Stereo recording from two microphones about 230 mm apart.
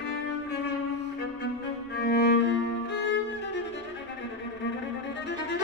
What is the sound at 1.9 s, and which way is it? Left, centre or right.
Music, left.